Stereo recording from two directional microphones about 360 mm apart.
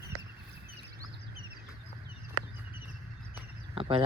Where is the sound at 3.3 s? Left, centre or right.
Centre.